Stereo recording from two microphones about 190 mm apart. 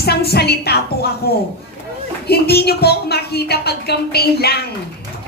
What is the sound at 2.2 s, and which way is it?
A woman's voice, 55° left (ahead or behind).